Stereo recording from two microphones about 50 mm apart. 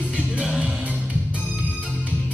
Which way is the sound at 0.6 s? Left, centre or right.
Right.